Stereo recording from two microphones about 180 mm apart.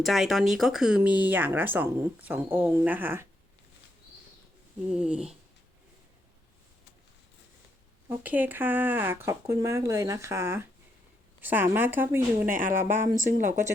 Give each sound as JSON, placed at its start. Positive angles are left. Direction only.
{"t": 0.0, "sound": "speech", "side_deg": 0}
{"t": 4.9, "sound": "speech", "side_deg": -5}
{"t": 8.1, "sound": "speech", "side_deg": -10}
{"t": 12.5, "sound": "speech", "side_deg": -50}